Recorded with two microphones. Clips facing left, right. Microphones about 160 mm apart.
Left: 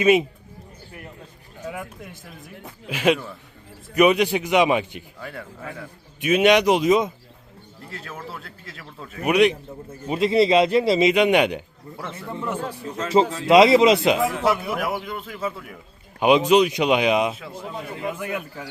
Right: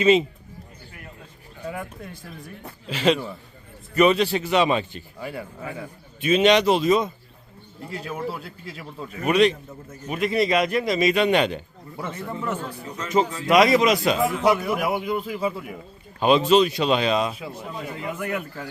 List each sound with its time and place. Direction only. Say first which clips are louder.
0.0 s speech: even; 10° left (ahead or behind)
1.6 s a sound: right 1 dB; centre (ahead or behind)
2.6 s speech: left 1 dB; 10° left (ahead or behind)
5.2 s a man's voice: right 3 dB; 5° right (ahead or behind)
6.1 s speech: left 1 dB; 10° left (ahead or behind)
7.9 s a man's voice: right 6 dB; centre (ahead or behind)
9.2 s speech: left 1 dB; 10° left (ahead or behind)
9.6 s a man's voice: left 4 dB; 30° left (ahead or behind); by 12.6 s 10° left (ahead or behind)
13.1 s a man's voice: left 3 dB; 30° left (ahead or behind)
14.2 s a man's voice: right 1 dB; centre (ahead or behind)
16.2 s speech: left 1 dB; 15° left (ahead or behind)